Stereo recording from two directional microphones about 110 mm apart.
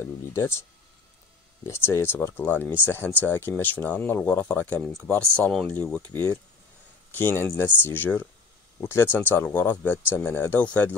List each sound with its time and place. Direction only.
0.0 s speech: 25° left (ahead or behind)
1.7 s speech: 20° left (ahead or behind)